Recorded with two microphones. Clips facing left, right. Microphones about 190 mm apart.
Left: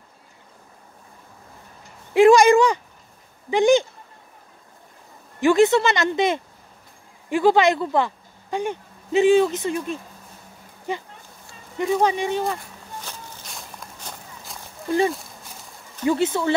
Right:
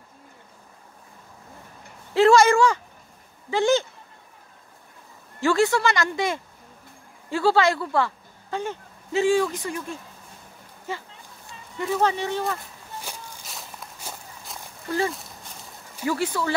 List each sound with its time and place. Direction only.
2.1 s a sound: 15° left (ahead or behind)
3.4 s speech: 15° left (ahead or behind)
5.4 s speech: 20° left (ahead or behind)
13.0 s walk: 5° right (ahead or behind)
14.9 s speech: 20° left (ahead or behind)